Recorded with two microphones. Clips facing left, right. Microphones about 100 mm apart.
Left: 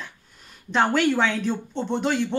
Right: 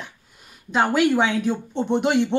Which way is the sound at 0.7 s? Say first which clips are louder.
Right 2 dB; 5° right (ahead or behind).